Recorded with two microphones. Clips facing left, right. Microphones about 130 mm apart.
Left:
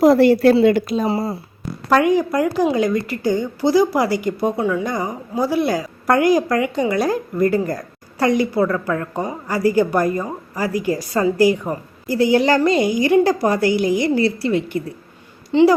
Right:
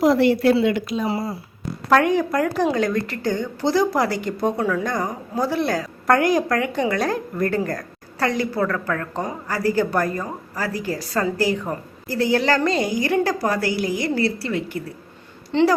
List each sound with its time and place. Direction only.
0.0 s speech: 40° left (ahead or behind)
1.9 s a woman's voice: 5° left (ahead or behind); by 14.8 s 20° left (ahead or behind)
15.5 s a woman's voice: 10° left (ahead or behind)